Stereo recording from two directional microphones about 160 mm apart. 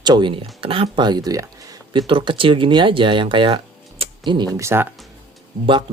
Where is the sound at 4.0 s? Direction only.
30° right (ahead or behind).